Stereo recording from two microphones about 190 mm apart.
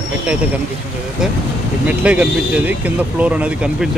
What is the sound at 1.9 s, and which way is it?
Speech, 5° right (ahead or behind).